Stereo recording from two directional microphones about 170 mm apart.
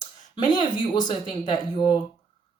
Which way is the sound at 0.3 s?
25° left (ahead or behind).